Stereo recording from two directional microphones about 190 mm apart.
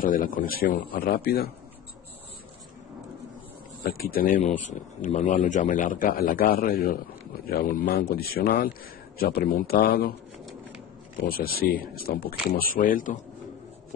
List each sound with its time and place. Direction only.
0.0 s a man's voice: 45° left (ahead or behind)
3.9 s a man's voice: 50° left (ahead or behind)
11.1 s a man's voice: 50° left (ahead or behind)